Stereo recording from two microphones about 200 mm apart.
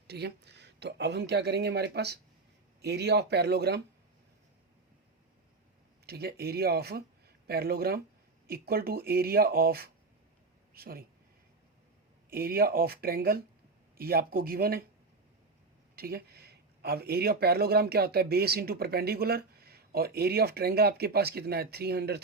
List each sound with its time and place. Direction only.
0.1 s speech: 55° right (ahead or behind)
6.1 s speech: 50° right (ahead or behind)
12.3 s speech: 50° right (ahead or behind)
16.0 s speech: 50° right (ahead or behind)